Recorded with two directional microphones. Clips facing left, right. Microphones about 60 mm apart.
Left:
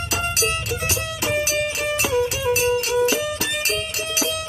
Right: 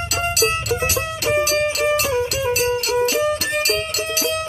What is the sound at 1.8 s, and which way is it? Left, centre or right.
Music, right.